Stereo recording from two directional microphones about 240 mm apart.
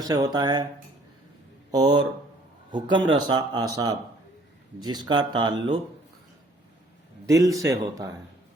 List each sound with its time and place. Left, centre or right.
0.0 s speech: centre
1.7 s speech: centre
7.3 s speech: centre